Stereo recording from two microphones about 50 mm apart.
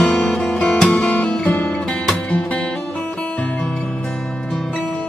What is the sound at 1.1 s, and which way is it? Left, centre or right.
Music, left.